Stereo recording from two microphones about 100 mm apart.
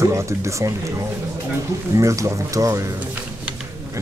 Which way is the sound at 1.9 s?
30° right (ahead or behind).